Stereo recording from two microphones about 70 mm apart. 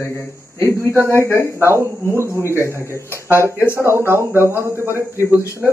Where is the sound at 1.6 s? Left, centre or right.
Right.